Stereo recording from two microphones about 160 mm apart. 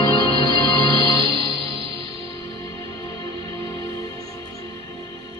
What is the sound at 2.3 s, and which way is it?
Music, 20° left (ahead or behind).